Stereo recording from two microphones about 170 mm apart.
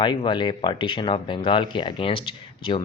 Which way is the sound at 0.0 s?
30° left (ahead or behind).